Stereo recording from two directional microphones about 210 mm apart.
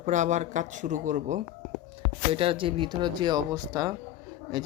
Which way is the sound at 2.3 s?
25° right (ahead or behind).